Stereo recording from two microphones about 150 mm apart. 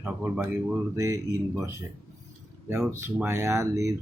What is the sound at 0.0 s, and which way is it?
Speech, 10° right (ahead or behind).